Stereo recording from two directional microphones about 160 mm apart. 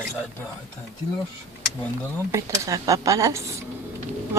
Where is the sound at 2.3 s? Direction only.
20° right (ahead or behind).